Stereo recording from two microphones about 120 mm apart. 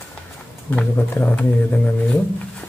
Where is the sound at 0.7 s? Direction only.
15° left (ahead or behind).